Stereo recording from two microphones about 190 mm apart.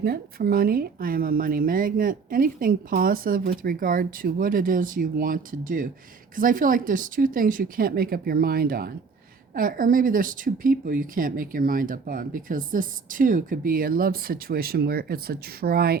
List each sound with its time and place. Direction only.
0.0 s speech: 55° right (ahead or behind)